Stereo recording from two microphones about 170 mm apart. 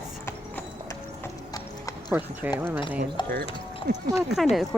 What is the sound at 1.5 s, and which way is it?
Clip-clop, 20° left (ahead or behind).